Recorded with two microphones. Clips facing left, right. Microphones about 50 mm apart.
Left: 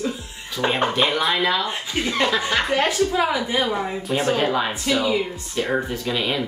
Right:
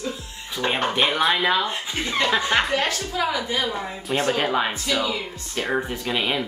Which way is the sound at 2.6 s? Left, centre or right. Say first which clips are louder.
Left 2 dB; centre.